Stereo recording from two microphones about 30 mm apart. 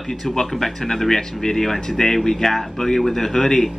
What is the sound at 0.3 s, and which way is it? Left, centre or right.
A man's voice, centre.